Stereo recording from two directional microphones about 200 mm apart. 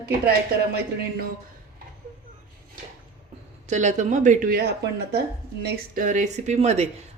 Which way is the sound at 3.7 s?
35° right (ahead or behind).